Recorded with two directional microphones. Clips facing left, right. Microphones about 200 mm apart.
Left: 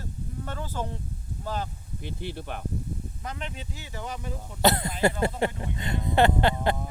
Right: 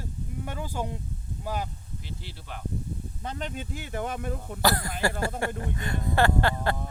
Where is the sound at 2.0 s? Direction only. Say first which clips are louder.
Left 11 dB; 55° left (ahead or behind).